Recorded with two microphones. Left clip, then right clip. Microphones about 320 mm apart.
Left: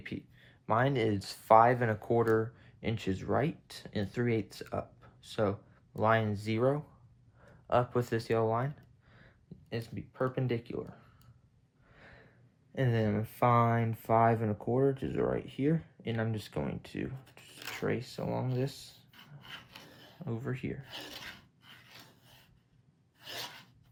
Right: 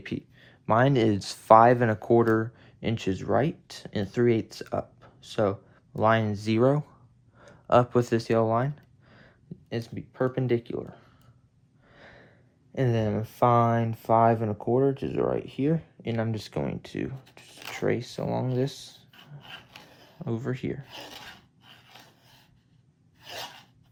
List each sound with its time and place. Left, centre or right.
0.0 s speech: right
11.9 s snort: right
12.7 s speech: right
20.2 s speech: right